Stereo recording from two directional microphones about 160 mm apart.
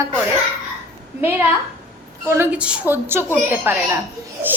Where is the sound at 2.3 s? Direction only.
10° right (ahead or behind).